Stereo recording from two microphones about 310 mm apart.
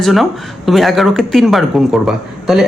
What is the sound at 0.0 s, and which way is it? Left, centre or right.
Speech, centre.